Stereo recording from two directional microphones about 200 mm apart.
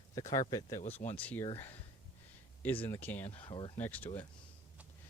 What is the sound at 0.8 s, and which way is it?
Speech, 35° left (ahead or behind).